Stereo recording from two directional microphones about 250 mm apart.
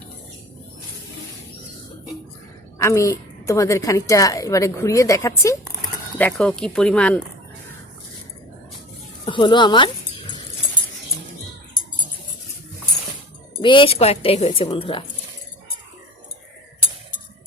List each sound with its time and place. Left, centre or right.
2.7 s a woman's voice: centre
9.2 s dog: centre
13.6 s a woman's voice: centre